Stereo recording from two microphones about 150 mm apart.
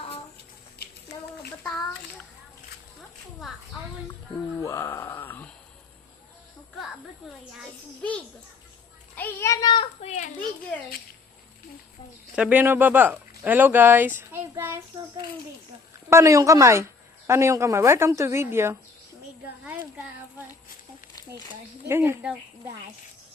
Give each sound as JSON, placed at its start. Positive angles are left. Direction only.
{"t": 0.8, "sound": "a sound", "side_deg": 90}
{"t": 4.6, "sound": "a sound", "side_deg": 20}
{"t": 9.1, "sound": "a child's voice", "side_deg": 15}
{"t": 10.0, "sound": "a child's voice", "side_deg": 55}
{"t": 12.4, "sound": "speech", "side_deg": -10}
{"t": 16.0, "sound": "a woman's voice", "side_deg": -20}
{"t": 21.8, "sound": "speech", "side_deg": -15}